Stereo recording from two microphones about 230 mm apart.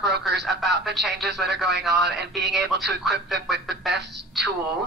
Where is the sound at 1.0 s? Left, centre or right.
Centre.